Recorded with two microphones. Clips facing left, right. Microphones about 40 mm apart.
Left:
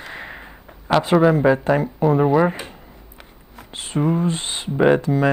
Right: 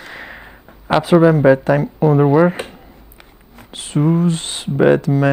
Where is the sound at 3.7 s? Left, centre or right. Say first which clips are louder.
Right 4 dB; centre.